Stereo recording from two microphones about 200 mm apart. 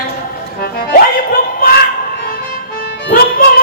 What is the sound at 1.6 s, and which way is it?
Speech, 45° left (ahead or behind).